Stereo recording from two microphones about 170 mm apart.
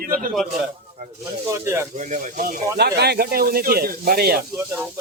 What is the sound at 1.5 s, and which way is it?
Speech, 15° right (ahead or behind).